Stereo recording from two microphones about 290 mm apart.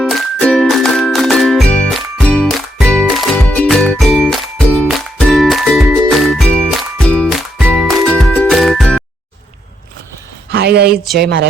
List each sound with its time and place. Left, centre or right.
0.0 s music: centre
10.5 s a woman's voice: right
10.9 s speech: centre
11.2 s speech: right